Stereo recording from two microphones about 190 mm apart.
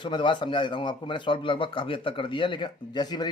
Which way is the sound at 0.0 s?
25° left (ahead or behind).